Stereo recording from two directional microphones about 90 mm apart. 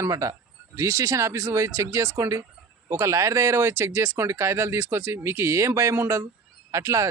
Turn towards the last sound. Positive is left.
turn(degrees=-35)  # may be behind; listen again after turning